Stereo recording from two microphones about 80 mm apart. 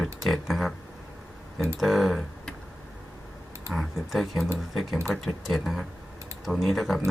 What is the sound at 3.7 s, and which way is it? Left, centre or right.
Speech, centre.